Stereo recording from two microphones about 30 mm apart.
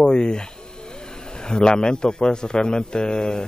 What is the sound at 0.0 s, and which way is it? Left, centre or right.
Speech, left.